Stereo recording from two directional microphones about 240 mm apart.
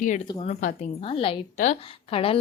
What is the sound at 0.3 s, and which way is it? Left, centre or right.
A woman's voice, left.